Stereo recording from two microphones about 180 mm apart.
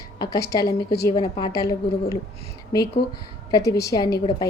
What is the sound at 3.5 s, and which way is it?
Speech, 15° left (ahead or behind).